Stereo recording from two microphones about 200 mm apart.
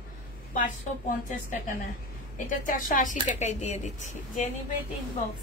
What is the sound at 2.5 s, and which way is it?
Speech, 40° left (ahead or behind).